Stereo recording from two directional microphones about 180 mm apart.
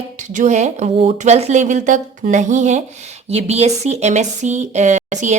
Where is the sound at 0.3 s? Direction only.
40° right (ahead or behind).